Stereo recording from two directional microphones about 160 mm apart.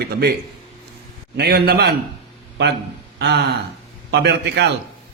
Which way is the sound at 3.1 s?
90° right.